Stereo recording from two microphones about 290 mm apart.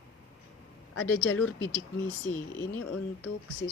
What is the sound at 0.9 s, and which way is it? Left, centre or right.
Speech, left.